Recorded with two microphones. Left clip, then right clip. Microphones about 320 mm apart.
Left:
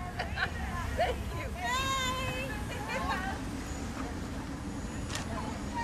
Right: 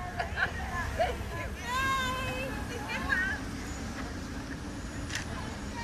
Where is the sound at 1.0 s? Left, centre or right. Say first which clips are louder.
Even; centre.